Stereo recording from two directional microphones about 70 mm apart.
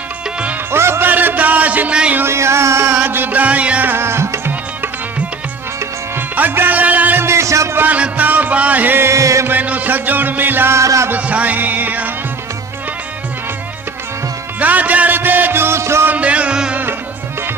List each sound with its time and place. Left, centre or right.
0.7 s music: right; by 2.2 s centre
2.2 s music: right
3.0 s music: right
3.9 s tabla: right
6.1 s music: right
7.2 s music: right
7.8 s music: right
9.0 s music: right
9.5 s music: right
10.8 s music: right
11.1 s music: right
14.6 s music: right
16.0 s music: right